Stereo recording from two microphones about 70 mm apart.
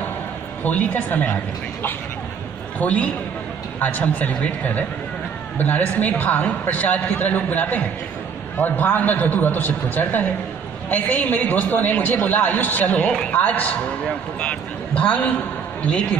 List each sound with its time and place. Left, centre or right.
0.7 s a man's voice: left